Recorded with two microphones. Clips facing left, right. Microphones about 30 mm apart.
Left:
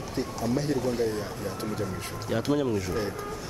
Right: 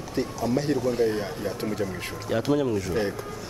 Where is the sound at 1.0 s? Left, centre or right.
Right.